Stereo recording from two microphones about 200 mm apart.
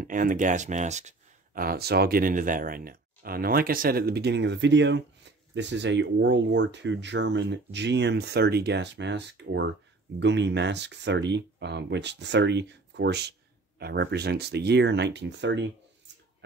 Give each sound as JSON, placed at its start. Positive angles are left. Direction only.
{"t": 0.0, "sound": "speech", "side_deg": -45}